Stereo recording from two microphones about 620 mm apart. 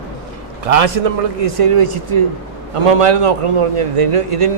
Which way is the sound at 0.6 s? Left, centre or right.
Right.